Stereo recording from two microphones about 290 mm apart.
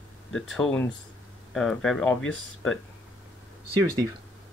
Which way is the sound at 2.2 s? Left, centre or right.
Left.